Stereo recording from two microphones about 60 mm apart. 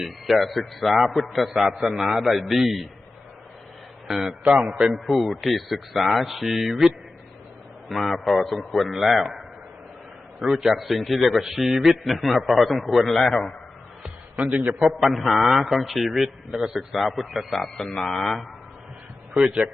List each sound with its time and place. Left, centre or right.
0.0 s a man's voice: centre
4.1 s a man's voice: centre
10.4 s a man's voice: centre
14.4 s a man's voice: right
14.8 s a man's voice: centre
19.3 s a man's voice: centre